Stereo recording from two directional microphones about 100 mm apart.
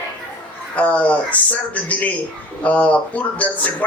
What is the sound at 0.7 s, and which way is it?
Speech, 15° left (ahead or behind).